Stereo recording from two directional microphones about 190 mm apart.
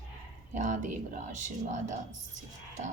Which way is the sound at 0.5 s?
40° right (ahead or behind).